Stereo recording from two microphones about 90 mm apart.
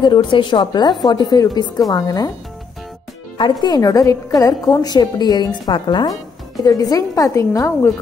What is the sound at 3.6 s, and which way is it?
A woman's voice, 45° left (ahead or behind).